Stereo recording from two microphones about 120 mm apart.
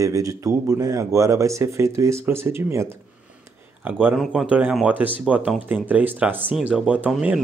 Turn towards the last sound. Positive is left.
turn(degrees=-10)  # may be behind; listen again after turning